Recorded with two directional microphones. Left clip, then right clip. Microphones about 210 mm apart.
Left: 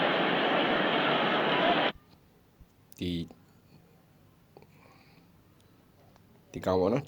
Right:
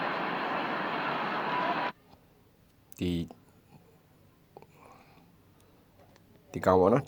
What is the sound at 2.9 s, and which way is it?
Speech, 10° right (ahead or behind).